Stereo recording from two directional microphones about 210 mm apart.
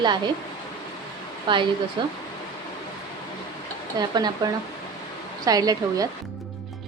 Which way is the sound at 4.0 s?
20° right (ahead or behind).